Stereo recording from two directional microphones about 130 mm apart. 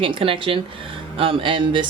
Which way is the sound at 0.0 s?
40° right (ahead or behind).